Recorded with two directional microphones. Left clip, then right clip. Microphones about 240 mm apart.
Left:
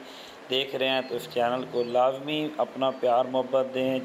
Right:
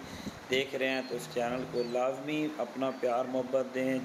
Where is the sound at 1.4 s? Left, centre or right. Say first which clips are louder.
Left 7 dB; centre.